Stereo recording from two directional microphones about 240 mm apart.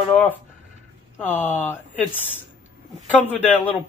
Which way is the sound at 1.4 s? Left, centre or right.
Centre.